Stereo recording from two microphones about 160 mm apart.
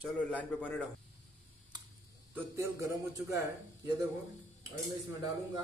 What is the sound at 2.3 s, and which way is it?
Speech, 20° right (ahead or behind).